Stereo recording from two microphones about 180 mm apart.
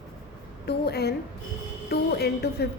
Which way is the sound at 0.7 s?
65° left (ahead or behind).